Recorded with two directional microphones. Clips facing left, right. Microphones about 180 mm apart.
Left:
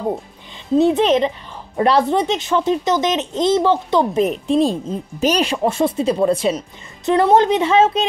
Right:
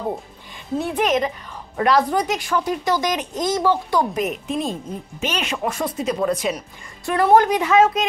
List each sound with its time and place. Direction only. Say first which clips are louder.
0.7 s a child's voice: left 7 dB; 25° left (ahead or behind)